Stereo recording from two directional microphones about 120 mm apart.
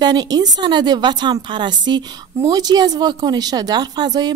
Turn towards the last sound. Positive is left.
turn(degrees=-35)  # may be behind; listen again after turning